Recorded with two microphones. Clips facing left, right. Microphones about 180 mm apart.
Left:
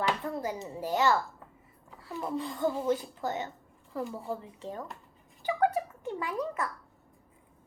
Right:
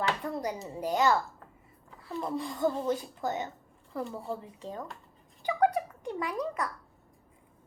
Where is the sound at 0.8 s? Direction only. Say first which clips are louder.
Right 1 dB; 15° right (ahead or behind).